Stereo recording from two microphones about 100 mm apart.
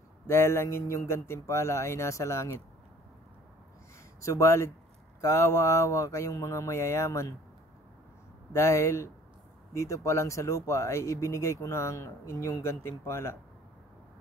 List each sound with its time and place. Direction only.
0.3 s speech: 25° left (ahead or behind)
4.2 s speech: 30° left (ahead or behind)
8.5 s speech: 30° left (ahead or behind)